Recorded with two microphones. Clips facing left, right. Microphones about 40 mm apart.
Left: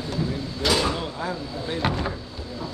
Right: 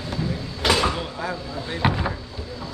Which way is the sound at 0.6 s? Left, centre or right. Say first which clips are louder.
Right 2 dB; right.